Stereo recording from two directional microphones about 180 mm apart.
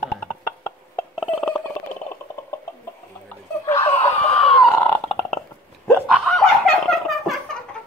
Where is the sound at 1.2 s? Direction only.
5° right (ahead or behind).